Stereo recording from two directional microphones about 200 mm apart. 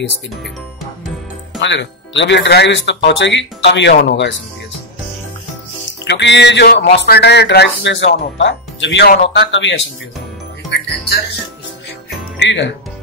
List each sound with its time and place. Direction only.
1.6 s speech: 65° left (ahead or behind)
6.0 s speech: 60° left (ahead or behind)
12.4 s speech: 60° left (ahead or behind)